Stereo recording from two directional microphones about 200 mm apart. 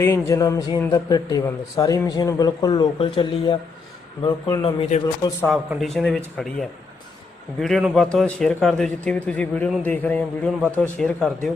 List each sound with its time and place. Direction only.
0.0 s a man's voice: 15° left (ahead or behind)
4.9 s a man's voice: 35° left (ahead or behind)
5.5 s a man's voice: centre (ahead or behind)